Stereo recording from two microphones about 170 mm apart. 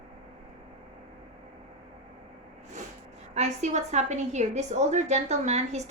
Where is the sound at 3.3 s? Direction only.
40° right (ahead or behind).